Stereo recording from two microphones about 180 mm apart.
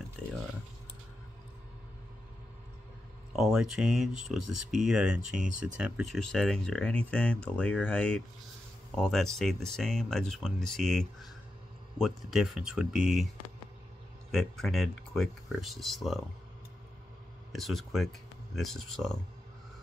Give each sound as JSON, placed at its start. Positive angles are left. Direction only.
{"t": 3.3, "sound": "speech", "side_deg": 0}
{"t": 5.3, "sound": "speech", "side_deg": -45}
{"t": 5.8, "sound": "speech", "side_deg": -5}
{"t": 14.3, "sound": "speech", "side_deg": 0}
{"t": 17.5, "sound": "speech", "side_deg": 0}